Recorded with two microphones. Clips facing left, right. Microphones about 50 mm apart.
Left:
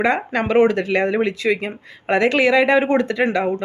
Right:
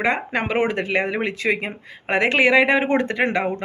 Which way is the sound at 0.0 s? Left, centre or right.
Centre.